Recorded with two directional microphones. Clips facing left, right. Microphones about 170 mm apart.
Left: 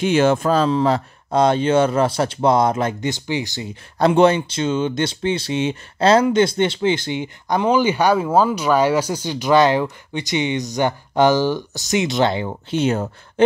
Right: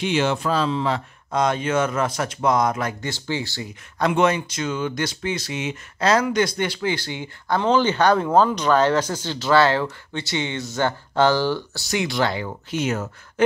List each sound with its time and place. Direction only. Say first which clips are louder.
0.0 s speech: left 6 dB; 45° left (ahead or behind); by 3.6 s 15° left (ahead or behind)
4.0 s speech: left 5 dB; 30° left (ahead or behind)